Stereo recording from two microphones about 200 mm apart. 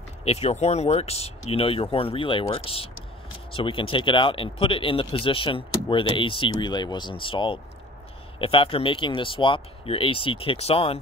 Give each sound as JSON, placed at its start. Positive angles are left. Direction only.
{"t": 0.2, "sound": "speech", "side_deg": 30}